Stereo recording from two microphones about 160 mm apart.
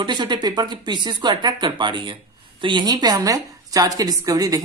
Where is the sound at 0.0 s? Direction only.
30° right (ahead or behind).